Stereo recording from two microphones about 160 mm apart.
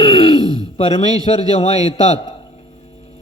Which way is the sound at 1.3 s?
40° left (ahead or behind).